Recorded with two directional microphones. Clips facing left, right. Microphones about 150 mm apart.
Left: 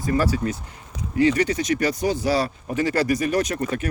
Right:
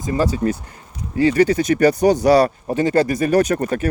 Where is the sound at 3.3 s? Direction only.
45° right (ahead or behind).